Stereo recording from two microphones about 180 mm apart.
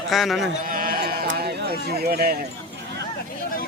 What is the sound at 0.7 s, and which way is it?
Sheep, 50° right (ahead or behind).